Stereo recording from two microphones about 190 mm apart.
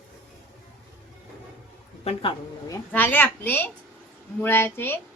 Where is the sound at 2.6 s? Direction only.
15° left (ahead or behind).